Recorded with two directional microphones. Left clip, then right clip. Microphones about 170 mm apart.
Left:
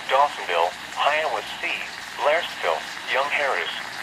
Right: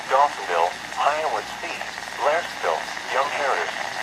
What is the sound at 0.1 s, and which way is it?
Speech, 10° left (ahead or behind).